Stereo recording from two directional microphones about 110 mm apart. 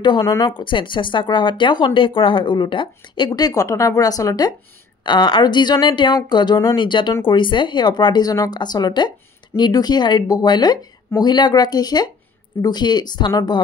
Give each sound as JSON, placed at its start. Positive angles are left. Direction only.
{"t": 0.2, "sound": "speech", "side_deg": 30}
{"t": 0.6, "sound": "speech", "side_deg": 50}
{"t": 5.0, "sound": "speech", "side_deg": 45}